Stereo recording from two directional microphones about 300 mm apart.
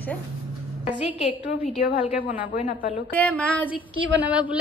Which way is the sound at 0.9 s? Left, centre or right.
Centre.